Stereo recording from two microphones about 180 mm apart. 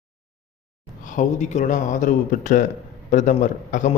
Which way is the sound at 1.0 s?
45° left (ahead or behind).